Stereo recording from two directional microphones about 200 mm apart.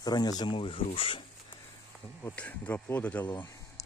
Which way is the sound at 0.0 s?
20° left (ahead or behind).